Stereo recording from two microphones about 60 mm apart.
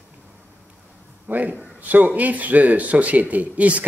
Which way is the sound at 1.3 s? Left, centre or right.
Right.